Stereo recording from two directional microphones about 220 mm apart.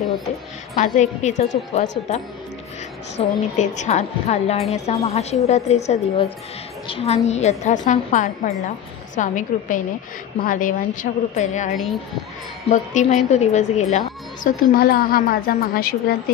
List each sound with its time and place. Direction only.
0.7 s a woman's voice: 35° left (ahead or behind)
11.7 s a child's voice: centre (ahead or behind)
12.6 s a woman's voice: 35° left (ahead or behind)